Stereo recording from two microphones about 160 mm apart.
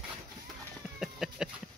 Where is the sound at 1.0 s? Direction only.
5° right (ahead or behind).